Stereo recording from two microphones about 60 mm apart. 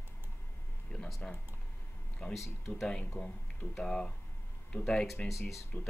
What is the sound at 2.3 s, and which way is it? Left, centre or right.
Speech, centre.